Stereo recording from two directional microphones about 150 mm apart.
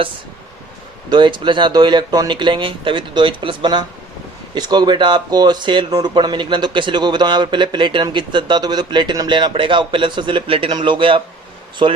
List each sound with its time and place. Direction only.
1.1 s speech: 30° right (ahead or behind)